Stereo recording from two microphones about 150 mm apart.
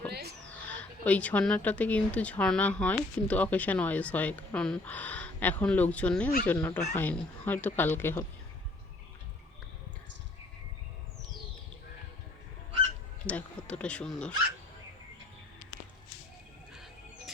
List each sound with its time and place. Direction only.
0.1 s a sound: 90° right
0.7 s speech: 10° left (ahead or behind)
13.2 s speech: 10° left (ahead or behind)